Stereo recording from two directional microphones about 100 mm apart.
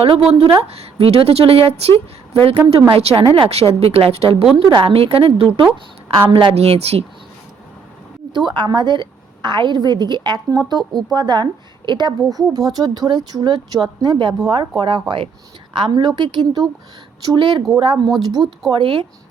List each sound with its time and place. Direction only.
0.3 s a woman's voice: 75° right (ahead or behind)
4.8 s a woman's voice: 60° right (ahead or behind)
6.3 s a woman's voice: 80° right
8.3 s a woman's voice: 50° right (ahead or behind)
18.7 s a woman's voice: 55° right (ahead or behind)